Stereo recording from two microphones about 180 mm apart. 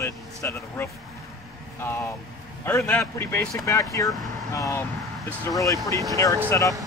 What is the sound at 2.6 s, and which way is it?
Speech, 10° left (ahead or behind).